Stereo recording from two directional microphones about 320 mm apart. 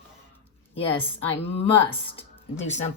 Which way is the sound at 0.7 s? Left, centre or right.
Centre.